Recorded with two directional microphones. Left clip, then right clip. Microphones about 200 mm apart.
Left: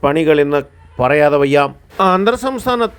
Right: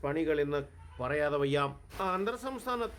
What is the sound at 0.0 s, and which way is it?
A man's voice, 35° left (ahead or behind).